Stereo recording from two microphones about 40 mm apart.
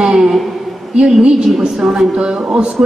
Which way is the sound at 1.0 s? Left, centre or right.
Right.